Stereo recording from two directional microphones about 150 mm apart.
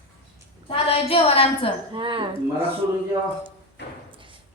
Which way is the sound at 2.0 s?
35° right (ahead or behind).